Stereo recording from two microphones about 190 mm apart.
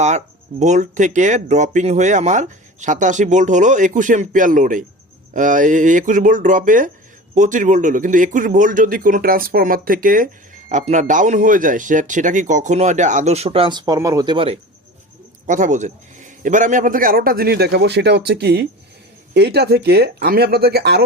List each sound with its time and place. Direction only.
0.6 s a man's voice: 40° right (ahead or behind)
15.4 s a man's voice: 40° right (ahead or behind); by 21.0 s 55° right (ahead or behind)